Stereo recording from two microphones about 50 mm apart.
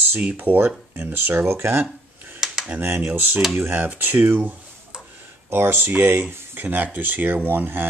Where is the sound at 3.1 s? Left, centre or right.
Right.